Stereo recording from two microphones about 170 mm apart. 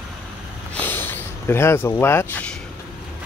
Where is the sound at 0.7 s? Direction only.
10° left (ahead or behind).